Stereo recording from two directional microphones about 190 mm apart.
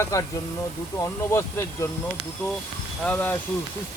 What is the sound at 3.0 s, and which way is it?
Speech, 10° left (ahead or behind).